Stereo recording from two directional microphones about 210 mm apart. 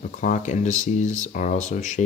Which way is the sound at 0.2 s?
35° left (ahead or behind).